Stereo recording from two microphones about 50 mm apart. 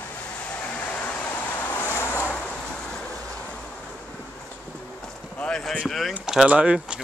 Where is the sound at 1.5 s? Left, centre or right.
Left.